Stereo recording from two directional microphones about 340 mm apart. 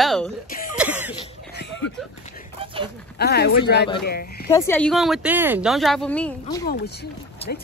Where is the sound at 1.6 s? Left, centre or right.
Left.